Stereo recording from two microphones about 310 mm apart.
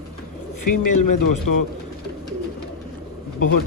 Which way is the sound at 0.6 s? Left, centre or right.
Left.